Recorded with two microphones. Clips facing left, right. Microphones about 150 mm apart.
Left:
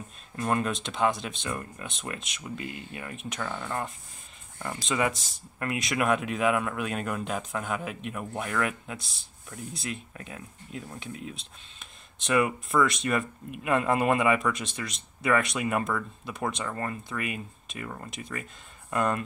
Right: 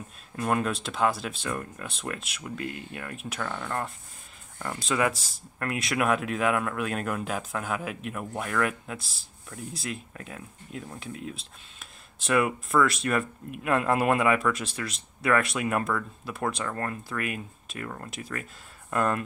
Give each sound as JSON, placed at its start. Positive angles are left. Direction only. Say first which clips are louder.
{"t": 0.4, "sound": "speech", "louder": "right 1 dB", "side_deg": -5}